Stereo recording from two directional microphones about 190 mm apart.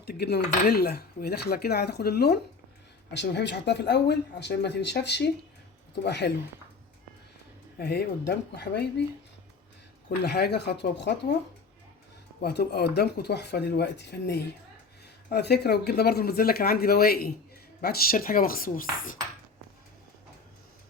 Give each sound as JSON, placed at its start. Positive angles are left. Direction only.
{"t": 0.0, "sound": "speech", "side_deg": 55}
{"t": 7.8, "sound": "speech", "side_deg": 55}
{"t": 10.2, "sound": "speech", "side_deg": 55}
{"t": 12.4, "sound": "speech", "side_deg": 55}